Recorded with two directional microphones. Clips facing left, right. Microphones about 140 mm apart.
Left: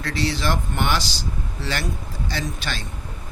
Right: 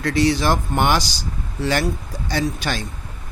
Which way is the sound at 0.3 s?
45° right (ahead or behind).